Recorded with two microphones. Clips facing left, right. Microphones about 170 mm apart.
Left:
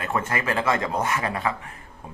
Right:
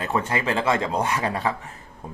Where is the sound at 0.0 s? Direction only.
25° right (ahead or behind).